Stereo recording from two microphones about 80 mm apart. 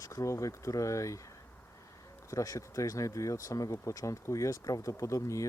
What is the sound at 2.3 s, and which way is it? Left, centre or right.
Speech, left.